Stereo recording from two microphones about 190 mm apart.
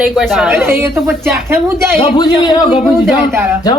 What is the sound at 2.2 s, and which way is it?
Speech, 20° left (ahead or behind).